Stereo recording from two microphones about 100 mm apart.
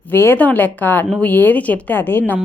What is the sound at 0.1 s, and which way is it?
A woman's voice, 20° left (ahead or behind).